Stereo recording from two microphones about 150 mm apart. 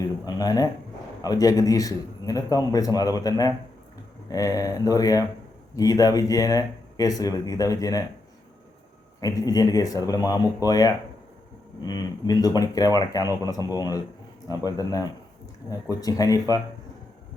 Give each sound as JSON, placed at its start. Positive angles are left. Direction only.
{"t": 0.3, "sound": "a man's voice", "side_deg": 25}
{"t": 9.2, "sound": "a man's voice", "side_deg": 25}